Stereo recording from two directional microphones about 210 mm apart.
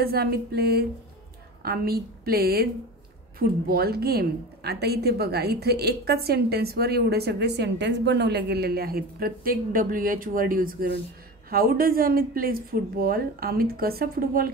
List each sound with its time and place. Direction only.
0.0 s a woman's voice: 45° right (ahead or behind)